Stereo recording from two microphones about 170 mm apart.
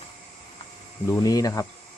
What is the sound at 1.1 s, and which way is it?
Speech, 20° left (ahead or behind).